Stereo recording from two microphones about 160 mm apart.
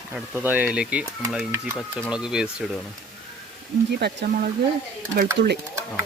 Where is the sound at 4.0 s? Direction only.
80° right.